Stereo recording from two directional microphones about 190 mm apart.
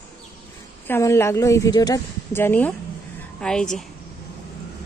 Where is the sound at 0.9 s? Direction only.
15° left (ahead or behind).